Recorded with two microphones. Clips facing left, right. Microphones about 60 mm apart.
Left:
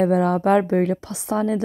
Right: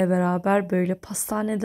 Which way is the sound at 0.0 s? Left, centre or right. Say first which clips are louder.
Left 4 dB; left.